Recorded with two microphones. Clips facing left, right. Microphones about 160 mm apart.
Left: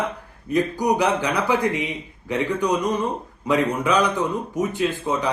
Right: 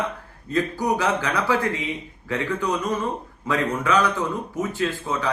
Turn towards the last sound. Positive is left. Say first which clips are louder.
# left 3 dB
turn(degrees=20)  # may be behind; listen again after turning